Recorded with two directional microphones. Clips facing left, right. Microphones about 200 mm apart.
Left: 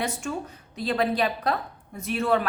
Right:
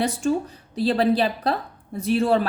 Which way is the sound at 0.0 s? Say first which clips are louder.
Right 7 dB; 35° right (ahead or behind).